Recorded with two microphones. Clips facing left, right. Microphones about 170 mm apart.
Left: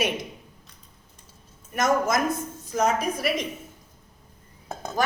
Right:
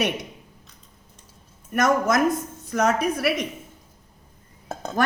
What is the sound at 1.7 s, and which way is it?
A woman's voice, 65° right (ahead or behind).